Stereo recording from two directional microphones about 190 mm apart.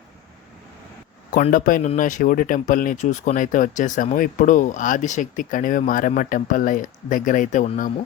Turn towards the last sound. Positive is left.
turn(degrees=40)  # may be behind; listen again after turning